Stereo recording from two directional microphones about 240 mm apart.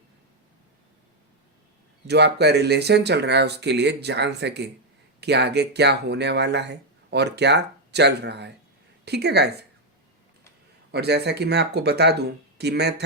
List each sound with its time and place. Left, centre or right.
2.0 s speech: right
10.9 s speech: right